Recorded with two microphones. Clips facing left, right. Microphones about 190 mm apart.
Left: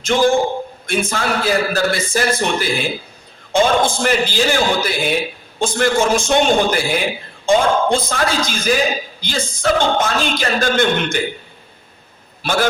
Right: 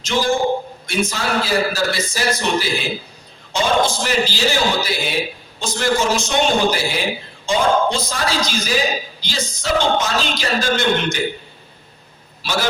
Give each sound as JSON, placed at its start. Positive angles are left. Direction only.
{"t": 0.0, "sound": "a man's voice", "side_deg": 50}
{"t": 12.4, "sound": "speech", "side_deg": 55}